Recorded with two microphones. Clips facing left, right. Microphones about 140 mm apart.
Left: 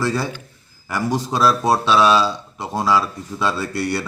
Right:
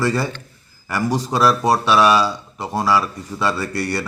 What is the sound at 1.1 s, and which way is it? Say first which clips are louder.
Speech: even; 15° right (ahead or behind).